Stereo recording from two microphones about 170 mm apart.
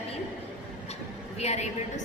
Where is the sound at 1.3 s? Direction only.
40° left (ahead or behind).